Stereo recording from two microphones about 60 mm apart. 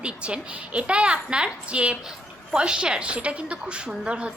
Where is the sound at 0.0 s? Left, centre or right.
Centre.